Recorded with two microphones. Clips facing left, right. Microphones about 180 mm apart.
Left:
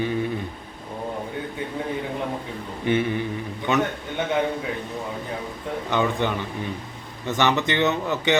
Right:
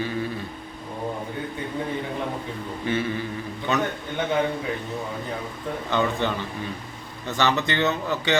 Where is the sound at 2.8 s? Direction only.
20° left (ahead or behind).